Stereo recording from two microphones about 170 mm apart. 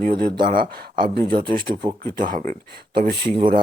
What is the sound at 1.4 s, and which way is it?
Speech, 30° right (ahead or behind).